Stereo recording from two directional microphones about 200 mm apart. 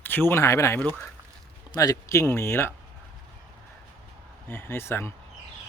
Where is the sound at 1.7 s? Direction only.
20° left (ahead or behind).